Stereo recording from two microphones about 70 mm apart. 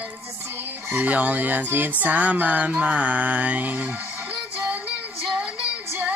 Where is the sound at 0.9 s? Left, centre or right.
Right.